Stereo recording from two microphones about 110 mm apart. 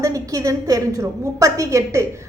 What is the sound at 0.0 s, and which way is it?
A woman's voice, 30° right (ahead or behind).